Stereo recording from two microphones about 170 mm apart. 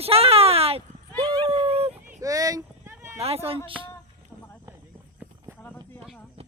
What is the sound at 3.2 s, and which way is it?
Speech, 35° right (ahead or behind).